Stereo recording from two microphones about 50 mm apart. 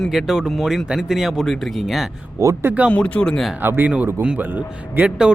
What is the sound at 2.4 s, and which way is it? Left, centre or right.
Speech, right.